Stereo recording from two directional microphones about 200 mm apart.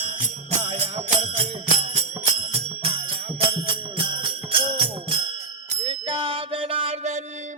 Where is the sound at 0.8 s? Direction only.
30° right (ahead or behind).